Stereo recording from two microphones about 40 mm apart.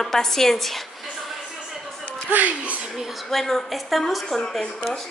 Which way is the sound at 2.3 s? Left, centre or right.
Right.